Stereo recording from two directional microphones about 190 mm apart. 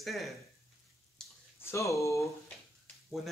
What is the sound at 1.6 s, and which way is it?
Speech, 10° left (ahead or behind).